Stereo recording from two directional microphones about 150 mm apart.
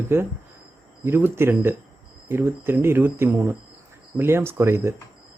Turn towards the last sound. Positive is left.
turn(degrees=-15)  # may be behind; listen again after turning